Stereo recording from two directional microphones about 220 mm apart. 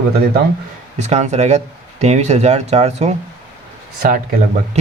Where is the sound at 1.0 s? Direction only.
30° right (ahead or behind).